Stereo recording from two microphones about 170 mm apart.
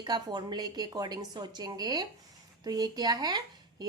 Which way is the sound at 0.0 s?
25° right (ahead or behind).